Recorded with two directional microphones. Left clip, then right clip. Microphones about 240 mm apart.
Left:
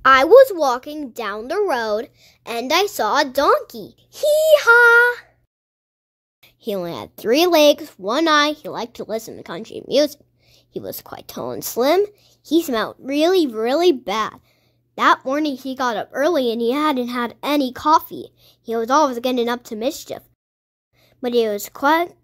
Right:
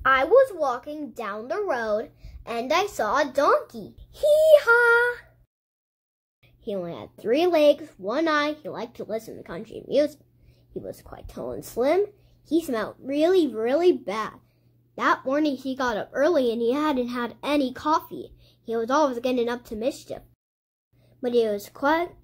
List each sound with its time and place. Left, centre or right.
0.0 s a woman's voice: left
6.4 s a woman's voice: left